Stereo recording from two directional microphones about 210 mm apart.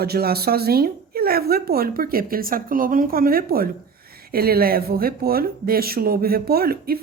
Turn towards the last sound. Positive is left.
turn(degrees=-45)  # may be behind; listen again after turning